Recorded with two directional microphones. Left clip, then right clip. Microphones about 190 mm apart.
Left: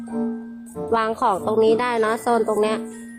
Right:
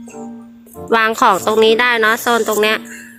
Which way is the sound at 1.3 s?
20° right (ahead or behind).